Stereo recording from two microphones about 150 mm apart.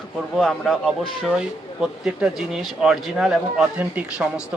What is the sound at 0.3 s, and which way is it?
Speech, 5° left (ahead or behind).